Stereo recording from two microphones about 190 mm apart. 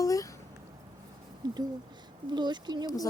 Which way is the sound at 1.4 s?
20° right (ahead or behind).